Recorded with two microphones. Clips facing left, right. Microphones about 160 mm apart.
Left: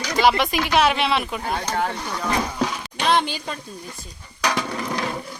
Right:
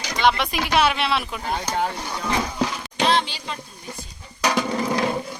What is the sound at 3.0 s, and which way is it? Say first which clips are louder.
Speech: left 1 dB; 55° left (ahead or behind).